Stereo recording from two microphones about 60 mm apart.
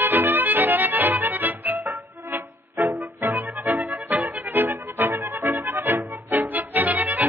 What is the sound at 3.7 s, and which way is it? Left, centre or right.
Accordion, right.